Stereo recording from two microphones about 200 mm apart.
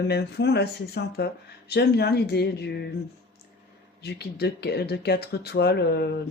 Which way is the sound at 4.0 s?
55° left (ahead or behind).